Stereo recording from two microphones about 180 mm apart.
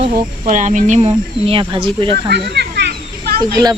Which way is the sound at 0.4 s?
45° right (ahead or behind).